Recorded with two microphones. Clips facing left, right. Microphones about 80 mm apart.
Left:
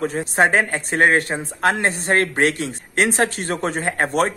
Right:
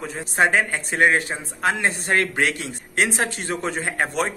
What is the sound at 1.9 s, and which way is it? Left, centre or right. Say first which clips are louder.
A man's voice: left 2 dB; left.